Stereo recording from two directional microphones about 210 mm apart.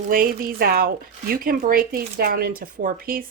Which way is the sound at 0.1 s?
40° right (ahead or behind).